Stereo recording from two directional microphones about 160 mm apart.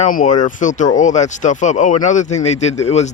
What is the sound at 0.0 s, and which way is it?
Speech, 55° left (ahead or behind).